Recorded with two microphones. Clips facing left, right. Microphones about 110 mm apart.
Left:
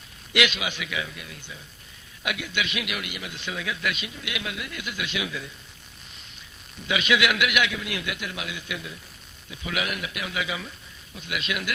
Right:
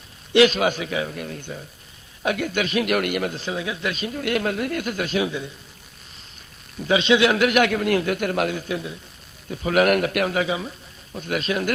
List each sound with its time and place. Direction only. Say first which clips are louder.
0.3 s a man's voice: right 10 dB; 40° right (ahead or behind)
3.3 s a man's voice: right 5 dB; 30° right (ahead or behind)
4.1 s a man's voice: right 11 dB; 50° right (ahead or behind); by 5.5 s 30° right (ahead or behind)
6.8 s a man's voice: right 6 dB; 30° right (ahead or behind)
9.5 s a man's voice: right 12 dB; 45° right (ahead or behind)